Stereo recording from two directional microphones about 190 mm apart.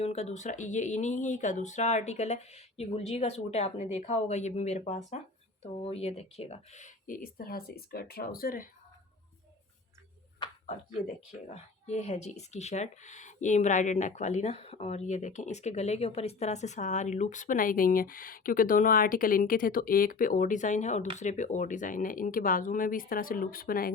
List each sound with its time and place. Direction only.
0.0 s speech: 35° left (ahead or behind)
11.5 s speech: 35° left (ahead or behind)